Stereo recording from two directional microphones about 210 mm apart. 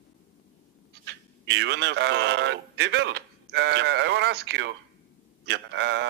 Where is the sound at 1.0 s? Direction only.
55° right (ahead or behind).